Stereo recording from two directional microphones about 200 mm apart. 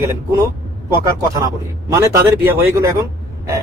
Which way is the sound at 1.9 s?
15° right (ahead or behind).